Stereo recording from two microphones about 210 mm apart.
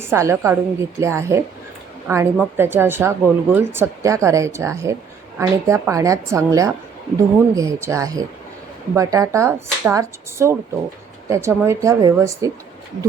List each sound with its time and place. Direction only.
0.0 s speech: 15° right (ahead or behind)